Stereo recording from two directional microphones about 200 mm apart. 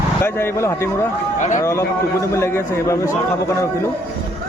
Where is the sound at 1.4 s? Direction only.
40° left (ahead or behind).